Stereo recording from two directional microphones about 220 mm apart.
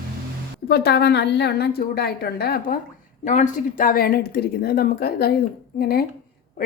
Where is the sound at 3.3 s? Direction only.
35° left (ahead or behind).